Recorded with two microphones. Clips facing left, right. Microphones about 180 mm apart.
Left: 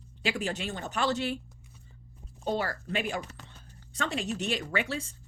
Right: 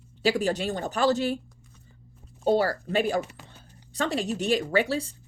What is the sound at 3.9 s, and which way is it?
A woman's voice, 35° right (ahead or behind).